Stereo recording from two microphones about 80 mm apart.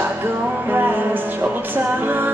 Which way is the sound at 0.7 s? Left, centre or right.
Right.